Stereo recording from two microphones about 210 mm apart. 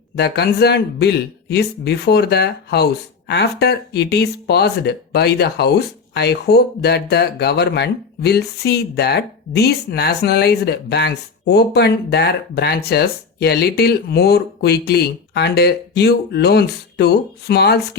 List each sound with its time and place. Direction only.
0.2 s speech: 50° left (ahead or behind)